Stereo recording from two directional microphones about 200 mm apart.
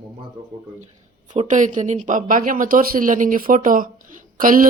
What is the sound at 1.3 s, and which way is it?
A woman's voice, 40° right (ahead or behind).